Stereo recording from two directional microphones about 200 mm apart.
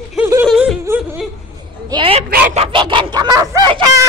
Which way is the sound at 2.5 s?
30° right (ahead or behind).